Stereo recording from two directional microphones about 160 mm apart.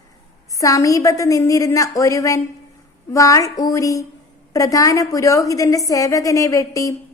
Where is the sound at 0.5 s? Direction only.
20° left (ahead or behind).